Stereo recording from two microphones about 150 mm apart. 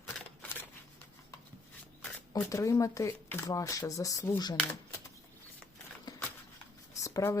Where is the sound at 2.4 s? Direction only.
20° left (ahead or behind).